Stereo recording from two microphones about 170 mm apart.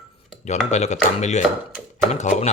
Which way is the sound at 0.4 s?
40° left (ahead or behind).